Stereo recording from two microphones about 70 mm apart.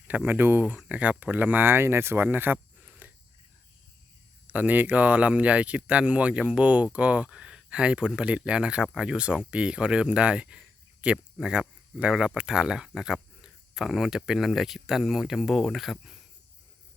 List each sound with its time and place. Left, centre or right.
0.3 s speech: right
0.9 s speech: centre
3.0 s a sound: right
4.4 s speech: right; by 16.1 s centre